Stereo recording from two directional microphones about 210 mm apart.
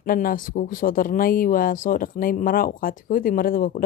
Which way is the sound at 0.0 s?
40° left (ahead or behind).